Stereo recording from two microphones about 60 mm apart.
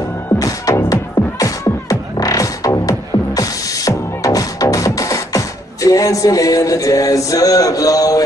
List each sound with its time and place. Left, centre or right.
0.4 s music: left
0.8 s music: left